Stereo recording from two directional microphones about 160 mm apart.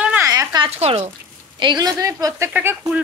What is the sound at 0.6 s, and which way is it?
Speech, 40° right (ahead or behind).